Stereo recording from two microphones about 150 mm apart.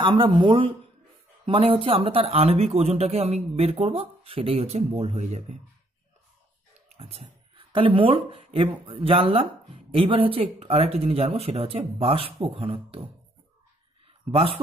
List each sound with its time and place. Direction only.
0.0 s speech: 35° right (ahead or behind); by 5.6 s 50° right (ahead or behind)
7.0 s speech: 45° right (ahead or behind)
14.3 s speech: 40° right (ahead or behind)